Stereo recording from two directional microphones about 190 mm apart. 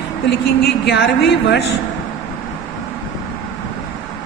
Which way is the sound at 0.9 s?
65° left (ahead or behind).